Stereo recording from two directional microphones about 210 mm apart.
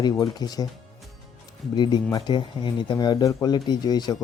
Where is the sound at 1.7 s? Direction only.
20° left (ahead or behind).